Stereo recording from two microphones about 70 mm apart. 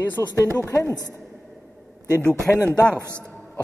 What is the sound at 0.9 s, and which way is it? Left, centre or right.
Speech, right.